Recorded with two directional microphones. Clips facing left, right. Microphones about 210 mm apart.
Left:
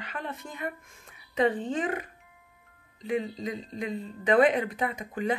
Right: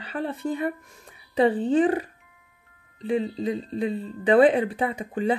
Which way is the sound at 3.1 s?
30° right (ahead or behind).